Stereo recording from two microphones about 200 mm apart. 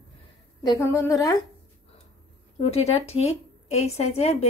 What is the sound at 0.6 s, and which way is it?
Speech, 15° left (ahead or behind).